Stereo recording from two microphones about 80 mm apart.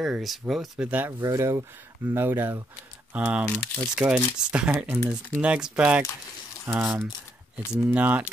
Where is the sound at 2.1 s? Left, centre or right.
Right; by 6.0 s centre.